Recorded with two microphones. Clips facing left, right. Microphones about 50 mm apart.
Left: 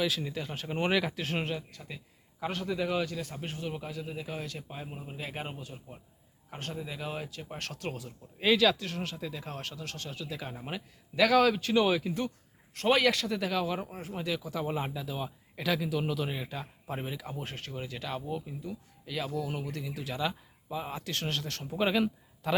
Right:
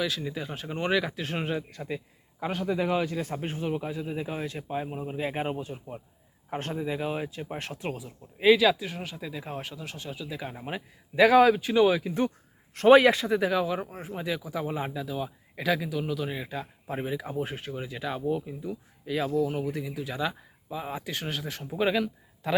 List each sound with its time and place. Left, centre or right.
0.0 s speech: centre
0.7 s speech: centre
1.8 s a man's voice: right
2.4 s speech: centre
11.5 s speech: centre
12.7 s speech: right; by 13.7 s centre
13.7 s speech: centre
15.5 s speech: centre